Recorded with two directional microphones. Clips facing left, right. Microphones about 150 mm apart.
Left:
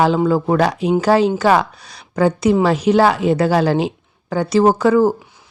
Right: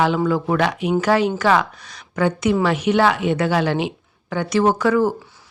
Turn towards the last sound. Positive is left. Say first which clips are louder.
# left 4 dB
turn(degrees=30)  # may be behind; listen again after turning